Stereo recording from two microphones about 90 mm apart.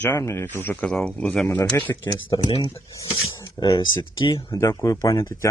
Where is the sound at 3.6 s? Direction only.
65° left (ahead or behind).